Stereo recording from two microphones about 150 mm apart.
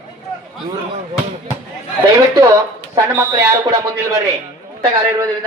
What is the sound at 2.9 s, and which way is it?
Speech, 20° right (ahead or behind).